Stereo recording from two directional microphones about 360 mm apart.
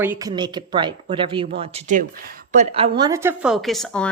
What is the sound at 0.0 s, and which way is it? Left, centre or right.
A woman's voice, centre.